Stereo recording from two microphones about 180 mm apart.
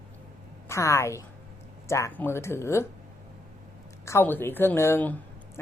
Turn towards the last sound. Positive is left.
turn(degrees=10)  # may be behind; listen again after turning